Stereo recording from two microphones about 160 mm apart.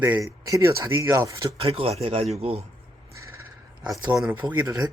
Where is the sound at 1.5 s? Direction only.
35° right (ahead or behind).